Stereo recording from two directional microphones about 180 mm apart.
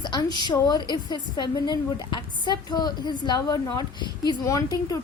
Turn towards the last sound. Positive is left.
turn(degrees=20)  # may be behind; listen again after turning